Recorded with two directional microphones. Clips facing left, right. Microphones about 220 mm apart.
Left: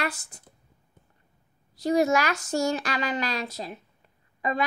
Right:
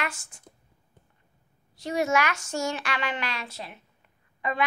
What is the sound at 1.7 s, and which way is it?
A woman's voice, 35° left (ahead or behind).